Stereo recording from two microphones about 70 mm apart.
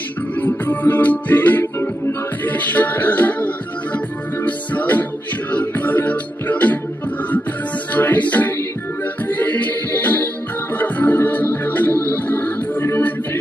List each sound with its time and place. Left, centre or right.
0.3 s music: left
7.9 s music: left